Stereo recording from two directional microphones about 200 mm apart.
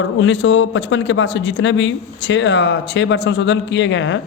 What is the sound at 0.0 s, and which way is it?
A man's voice, 70° left (ahead or behind).